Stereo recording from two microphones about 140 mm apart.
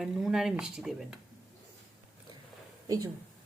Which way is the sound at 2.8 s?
25° right (ahead or behind).